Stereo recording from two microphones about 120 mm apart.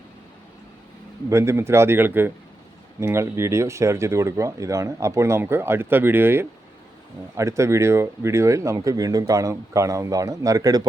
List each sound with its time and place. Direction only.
1.3 s speech: 20° right (ahead or behind)